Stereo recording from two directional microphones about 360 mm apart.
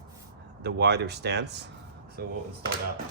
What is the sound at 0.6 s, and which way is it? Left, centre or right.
Speech, right.